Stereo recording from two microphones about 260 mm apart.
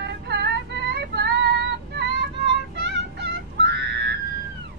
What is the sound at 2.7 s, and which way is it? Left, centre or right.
Music, right.